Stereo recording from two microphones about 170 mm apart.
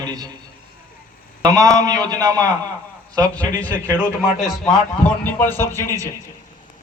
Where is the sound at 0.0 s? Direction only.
25° right (ahead or behind).